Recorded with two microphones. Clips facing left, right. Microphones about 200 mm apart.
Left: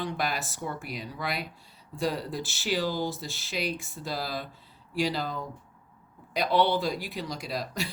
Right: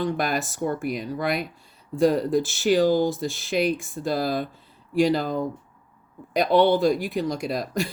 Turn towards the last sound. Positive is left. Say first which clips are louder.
# right 7 dB
turn(degrees=-50)  # may be behind; listen again after turning